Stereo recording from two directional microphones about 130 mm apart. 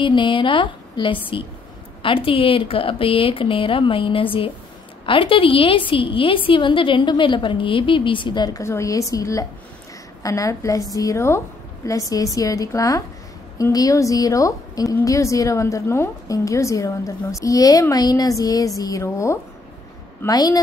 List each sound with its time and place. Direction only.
0.0 s a woman's voice: 40° left (ahead or behind)
8.6 s a woman's voice: 25° left (ahead or behind)